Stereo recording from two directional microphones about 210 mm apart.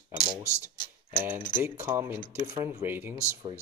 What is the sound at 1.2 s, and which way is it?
Speech, 10° right (ahead or behind).